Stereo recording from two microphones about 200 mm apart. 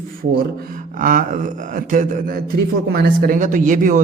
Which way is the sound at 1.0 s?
40° right (ahead or behind).